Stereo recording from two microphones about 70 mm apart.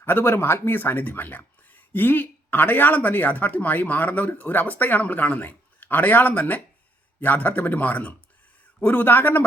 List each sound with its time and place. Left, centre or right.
0.0 s speech: left